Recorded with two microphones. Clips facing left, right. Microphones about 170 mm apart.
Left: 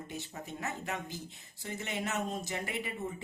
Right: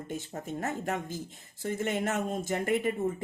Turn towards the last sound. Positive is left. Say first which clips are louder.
# right 10 dB
turn(degrees=-50)  # may be behind; listen again after turning